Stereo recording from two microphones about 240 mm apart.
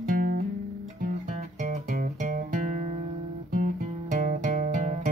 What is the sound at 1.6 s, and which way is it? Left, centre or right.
Music, right.